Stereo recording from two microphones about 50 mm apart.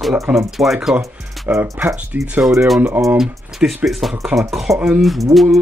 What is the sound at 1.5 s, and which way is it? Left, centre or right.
Speech, right.